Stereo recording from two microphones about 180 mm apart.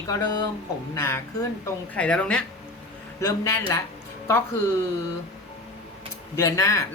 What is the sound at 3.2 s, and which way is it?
Speech, 20° left (ahead or behind).